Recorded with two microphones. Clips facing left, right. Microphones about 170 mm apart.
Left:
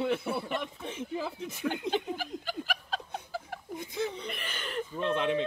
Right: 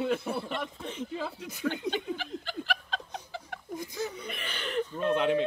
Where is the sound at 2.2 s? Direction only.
5° left (ahead or behind).